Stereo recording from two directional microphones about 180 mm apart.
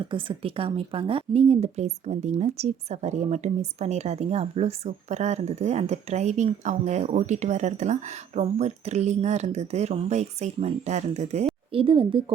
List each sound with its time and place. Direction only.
0.1 s speech: 30° right (ahead or behind)